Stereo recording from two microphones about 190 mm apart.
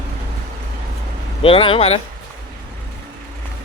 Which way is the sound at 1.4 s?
30° left (ahead or behind).